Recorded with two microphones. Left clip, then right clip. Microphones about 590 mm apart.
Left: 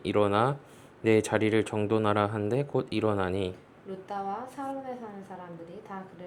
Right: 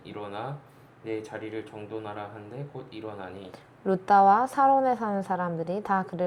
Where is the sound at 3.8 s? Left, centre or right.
Right.